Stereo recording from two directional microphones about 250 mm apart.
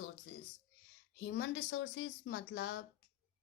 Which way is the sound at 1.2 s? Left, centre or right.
Left.